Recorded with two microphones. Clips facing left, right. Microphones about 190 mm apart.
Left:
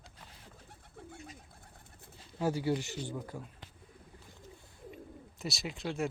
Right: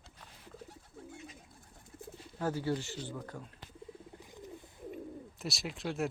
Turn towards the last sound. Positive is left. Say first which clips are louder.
# even
turn(degrees=0)  # may be behind; listen again after turning